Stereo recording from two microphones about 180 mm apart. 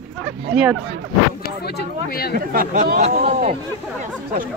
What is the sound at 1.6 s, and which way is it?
Speech, 60° left (ahead or behind).